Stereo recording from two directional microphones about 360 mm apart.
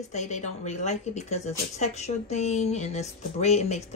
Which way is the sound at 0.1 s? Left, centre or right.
Centre.